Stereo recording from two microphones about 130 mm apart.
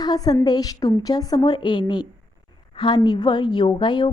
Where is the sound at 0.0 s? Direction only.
30° left (ahead or behind).